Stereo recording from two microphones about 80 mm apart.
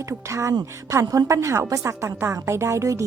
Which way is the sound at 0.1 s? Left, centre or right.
Right.